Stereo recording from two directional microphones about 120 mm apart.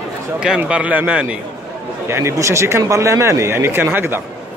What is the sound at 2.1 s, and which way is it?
A man's voice, 25° right (ahead or behind).